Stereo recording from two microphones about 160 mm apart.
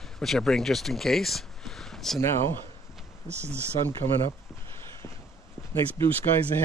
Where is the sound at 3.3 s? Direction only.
15° right (ahead or behind).